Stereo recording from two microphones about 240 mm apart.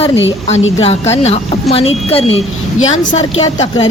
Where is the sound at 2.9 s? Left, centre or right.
Left.